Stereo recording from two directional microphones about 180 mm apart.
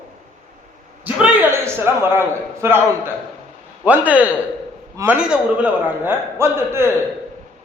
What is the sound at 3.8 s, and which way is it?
A man's voice, 10° right (ahead or behind).